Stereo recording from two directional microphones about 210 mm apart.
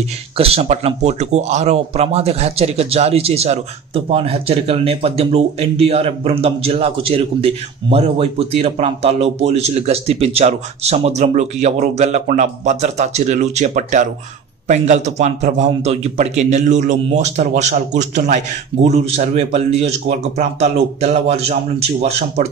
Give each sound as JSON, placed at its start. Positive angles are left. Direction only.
{"t": 0.4, "sound": "a man's voice", "side_deg": -30}